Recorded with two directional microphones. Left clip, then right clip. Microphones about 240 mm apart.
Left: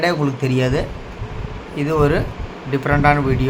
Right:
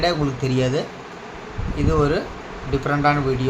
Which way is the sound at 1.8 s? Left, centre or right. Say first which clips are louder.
Left 3 dB; centre.